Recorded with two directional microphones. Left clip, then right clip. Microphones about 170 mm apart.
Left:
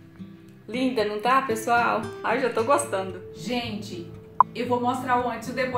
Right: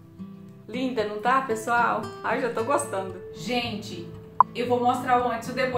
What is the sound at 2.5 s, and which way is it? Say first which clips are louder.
Speech: left 3 dB; 40° left (ahead or behind).